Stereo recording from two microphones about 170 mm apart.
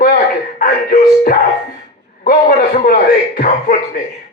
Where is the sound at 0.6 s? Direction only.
60° left (ahead or behind).